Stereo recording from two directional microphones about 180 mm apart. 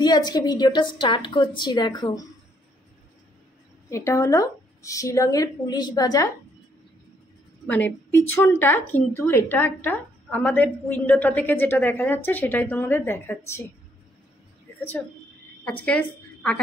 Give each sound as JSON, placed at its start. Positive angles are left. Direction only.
{"t": 0.0, "sound": "a woman's voice", "side_deg": 25}
{"t": 3.9, "sound": "speech", "side_deg": 15}
{"t": 7.6, "sound": "speech", "side_deg": 10}
{"t": 15.8, "sound": "a woman's voice", "side_deg": 5}